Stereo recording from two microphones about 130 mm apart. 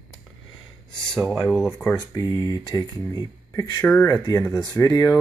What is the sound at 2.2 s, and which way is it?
Speech, 30° left (ahead or behind).